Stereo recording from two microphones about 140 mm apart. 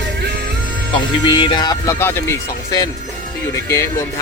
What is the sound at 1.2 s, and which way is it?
Speech, 35° left (ahead or behind).